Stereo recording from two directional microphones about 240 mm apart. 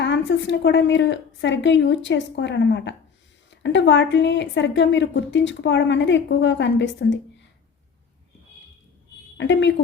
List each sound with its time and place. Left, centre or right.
0.0 s a woman's voice: left
9.4 s a woman's voice: left